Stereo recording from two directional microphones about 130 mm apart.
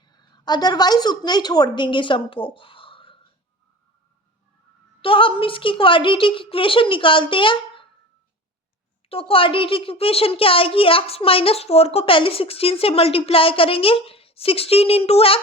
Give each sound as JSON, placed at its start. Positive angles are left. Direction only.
{"t": 0.0, "sound": "a woman's voice", "side_deg": 35}
{"t": 5.0, "sound": "a woman's voice", "side_deg": 40}
{"t": 9.0, "sound": "a woman's voice", "side_deg": 45}